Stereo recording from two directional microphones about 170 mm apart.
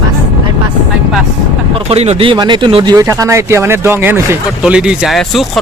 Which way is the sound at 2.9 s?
20° right (ahead or behind).